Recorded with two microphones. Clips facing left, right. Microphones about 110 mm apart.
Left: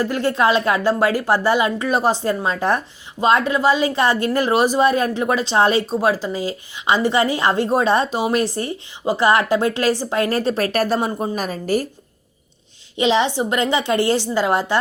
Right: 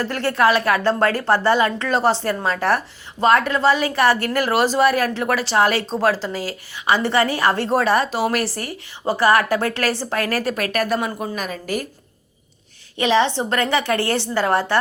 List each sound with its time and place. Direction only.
0.0 s a woman's voice: 15° left (ahead or behind); by 11.9 s 35° left (ahead or behind)
13.0 s a woman's voice: 15° left (ahead or behind)